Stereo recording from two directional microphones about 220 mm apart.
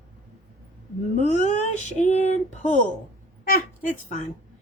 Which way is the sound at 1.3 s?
30° left (ahead or behind).